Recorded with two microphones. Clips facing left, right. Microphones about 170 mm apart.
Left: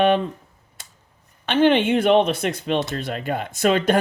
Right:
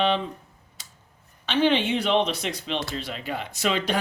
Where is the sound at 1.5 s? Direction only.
55° left (ahead or behind).